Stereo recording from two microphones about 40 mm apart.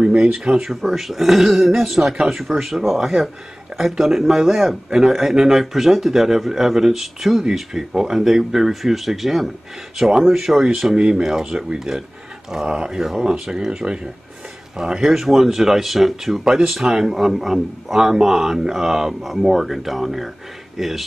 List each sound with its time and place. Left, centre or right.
0.0 s speech: right
0.6 s speech: centre
11.0 s speech: centre